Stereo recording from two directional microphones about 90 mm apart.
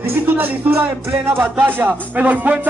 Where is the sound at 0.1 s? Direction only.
25° right (ahead or behind).